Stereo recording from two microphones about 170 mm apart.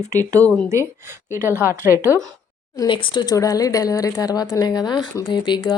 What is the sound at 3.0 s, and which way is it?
Speech, 25° left (ahead or behind).